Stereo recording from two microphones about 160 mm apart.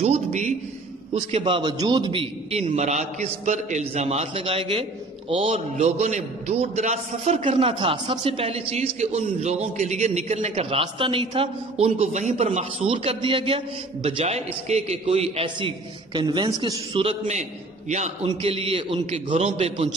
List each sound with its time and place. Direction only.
0.0 s a man's voice: 45° right (ahead or behind)
1.3 s a man's voice: 35° right (ahead or behind)
2.6 s a man's voice: 45° right (ahead or behind); by 16.8 s 25° right (ahead or behind)
16.9 s a man's voice: 40° right (ahead or behind)